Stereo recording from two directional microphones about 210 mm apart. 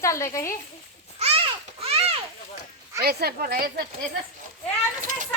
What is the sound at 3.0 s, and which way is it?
Speech, 50° right (ahead or behind).